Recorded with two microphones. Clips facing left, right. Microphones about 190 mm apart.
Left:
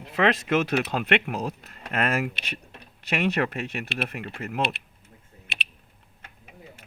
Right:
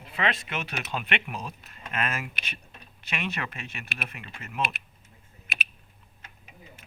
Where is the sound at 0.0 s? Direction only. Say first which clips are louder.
Left 8 dB; 80° left.